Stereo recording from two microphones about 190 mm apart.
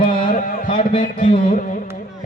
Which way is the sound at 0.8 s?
40° left (ahead or behind).